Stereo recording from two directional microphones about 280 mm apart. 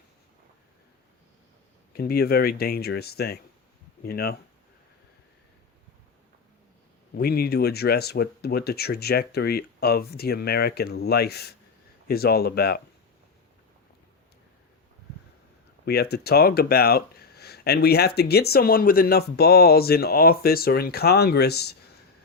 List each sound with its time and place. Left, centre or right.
1.9 s speech: left
7.1 s speech: left
15.9 s speech: left